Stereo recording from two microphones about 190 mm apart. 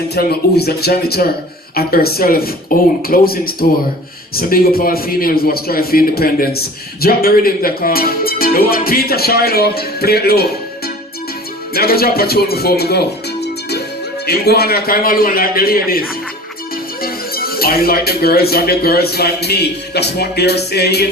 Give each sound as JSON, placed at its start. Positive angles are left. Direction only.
{"t": 0.1, "sound": "speech", "side_deg": 55}
{"t": 11.7, "sound": "speech", "side_deg": 55}